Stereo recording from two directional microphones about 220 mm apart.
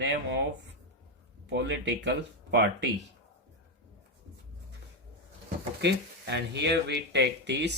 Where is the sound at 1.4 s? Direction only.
50° right (ahead or behind).